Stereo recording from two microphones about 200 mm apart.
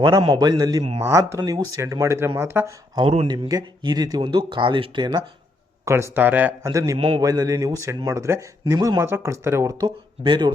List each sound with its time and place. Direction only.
0.0 s speech: 20° right (ahead or behind)
3.0 s speech: 30° right (ahead or behind)